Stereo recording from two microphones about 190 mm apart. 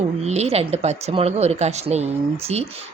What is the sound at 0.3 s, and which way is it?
A woman's voice, 35° right (ahead or behind).